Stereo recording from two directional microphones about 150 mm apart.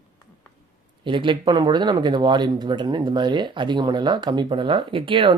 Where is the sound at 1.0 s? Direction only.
35° right (ahead or behind).